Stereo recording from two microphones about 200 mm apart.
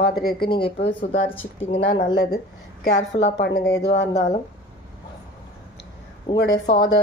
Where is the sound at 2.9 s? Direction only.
60° left (ahead or behind).